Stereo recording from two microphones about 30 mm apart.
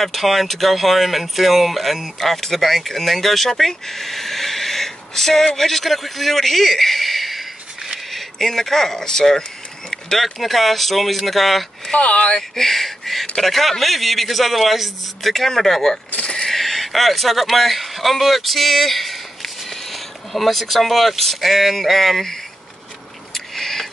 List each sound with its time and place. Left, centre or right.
0.0 s a man's voice: centre
9.8 s a sound: centre
10.2 s speech: centre
12.0 s speech: left
12.5 s speech: centre
23.3 s a sound: centre